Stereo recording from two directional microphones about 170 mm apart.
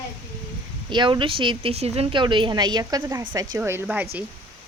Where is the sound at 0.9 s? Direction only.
25° right (ahead or behind); by 4.1 s 10° right (ahead or behind).